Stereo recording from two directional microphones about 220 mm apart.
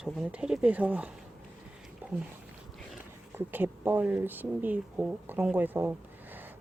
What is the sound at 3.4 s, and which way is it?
Speech, 10° right (ahead or behind).